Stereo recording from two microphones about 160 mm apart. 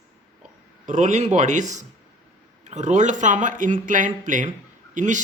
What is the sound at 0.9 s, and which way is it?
Speech, 50° right (ahead or behind).